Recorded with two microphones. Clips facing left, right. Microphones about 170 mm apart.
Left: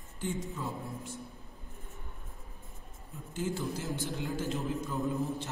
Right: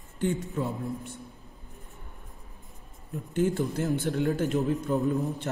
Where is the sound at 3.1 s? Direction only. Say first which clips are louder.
Right 9 dB; 65° right (ahead or behind).